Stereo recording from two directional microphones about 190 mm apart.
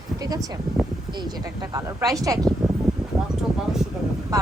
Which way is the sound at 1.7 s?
20° right (ahead or behind).